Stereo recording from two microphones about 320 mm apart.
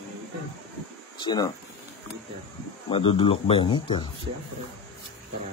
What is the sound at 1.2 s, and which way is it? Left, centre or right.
Snicker, centre.